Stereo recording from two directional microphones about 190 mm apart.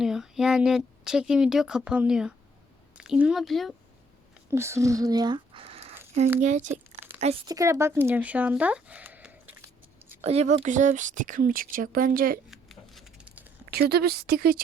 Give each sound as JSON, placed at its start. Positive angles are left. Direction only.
{"t": 0.0, "sound": "a woman's voice", "side_deg": -5}
{"t": 4.5, "sound": "speech", "side_deg": -15}
{"t": 7.0, "sound": "a sound", "side_deg": -40}
{"t": 7.4, "sound": "speech", "side_deg": -15}
{"t": 10.2, "sound": "speech", "side_deg": -35}
{"t": 12.5, "sound": "a sound", "side_deg": 0}
{"t": 13.7, "sound": "speech", "side_deg": -55}